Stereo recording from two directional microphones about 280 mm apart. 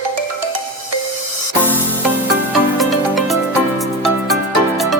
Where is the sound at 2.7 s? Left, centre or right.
Centre.